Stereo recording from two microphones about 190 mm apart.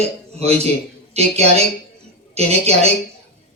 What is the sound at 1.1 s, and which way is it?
Speech, 35° right (ahead or behind).